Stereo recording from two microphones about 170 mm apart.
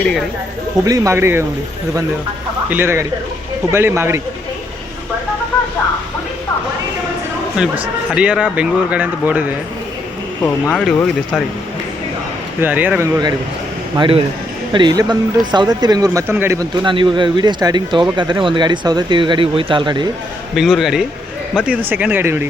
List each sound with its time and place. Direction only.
0.0 s speech: centre (ahead or behind)
0.9 s speech: 20° right (ahead or behind)
2.6 s speech: 15° right (ahead or behind)
7.6 s speech: 5° right (ahead or behind)
10.4 s speech: centre (ahead or behind)
12.5 s speech: 10° right (ahead or behind)
13.9 s speech: 30° right (ahead or behind)
16.8 s speech: 30° right (ahead or behind)
20.6 s speech: centre (ahead or behind)